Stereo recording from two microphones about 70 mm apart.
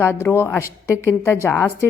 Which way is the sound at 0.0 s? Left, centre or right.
Left.